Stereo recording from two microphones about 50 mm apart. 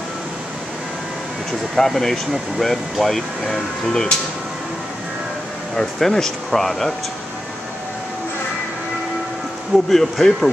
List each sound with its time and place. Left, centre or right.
1.8 s speech: centre
5.8 s speech: centre
9.8 s speech: centre